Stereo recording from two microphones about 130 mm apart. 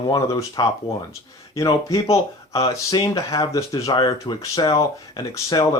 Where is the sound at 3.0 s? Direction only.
25° left (ahead or behind).